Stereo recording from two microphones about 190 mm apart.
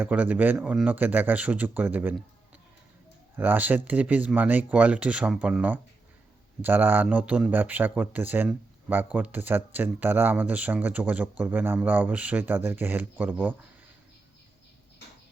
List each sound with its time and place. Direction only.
0.0 s speech: 10° right (ahead or behind)
3.3 s speech: 10° right (ahead or behind)